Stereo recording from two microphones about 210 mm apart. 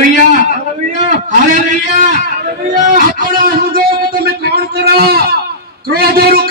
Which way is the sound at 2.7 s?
35° right (ahead or behind).